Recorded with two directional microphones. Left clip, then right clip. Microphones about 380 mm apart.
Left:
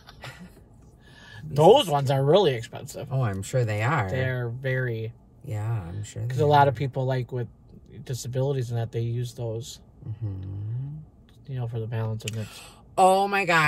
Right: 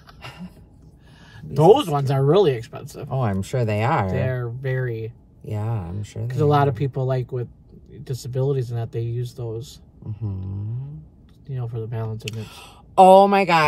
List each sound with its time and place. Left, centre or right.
1.2 s speech: centre
3.1 s speech: centre
4.1 s speech: centre
5.4 s speech: centre
6.2 s speech: centre
11.4 s speech: centre
12.4 s speech: centre